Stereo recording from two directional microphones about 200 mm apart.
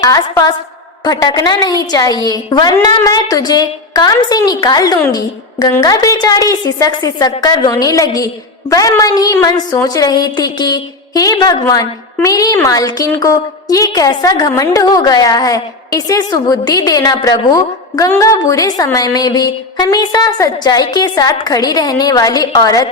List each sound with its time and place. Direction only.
0.0 s a woman's voice: 15° left (ahead or behind)